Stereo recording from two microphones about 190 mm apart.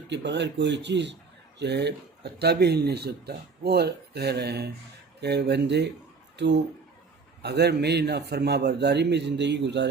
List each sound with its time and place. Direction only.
0.1 s speech: 65° right (ahead or behind)